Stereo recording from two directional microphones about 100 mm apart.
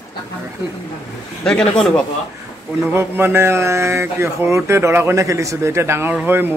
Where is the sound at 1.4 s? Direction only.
10° left (ahead or behind).